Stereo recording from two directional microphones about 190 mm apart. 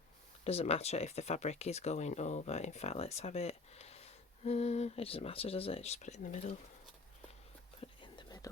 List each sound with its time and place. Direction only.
0.4 s speech: 35° left (ahead or behind)
7.8 s whispering: 25° left (ahead or behind)